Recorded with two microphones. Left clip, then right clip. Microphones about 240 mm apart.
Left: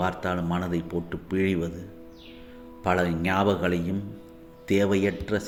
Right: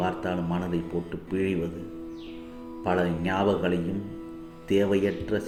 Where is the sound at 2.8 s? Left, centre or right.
Left.